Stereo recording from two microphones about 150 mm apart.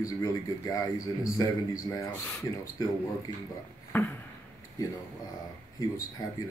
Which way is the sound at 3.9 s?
15° left (ahead or behind).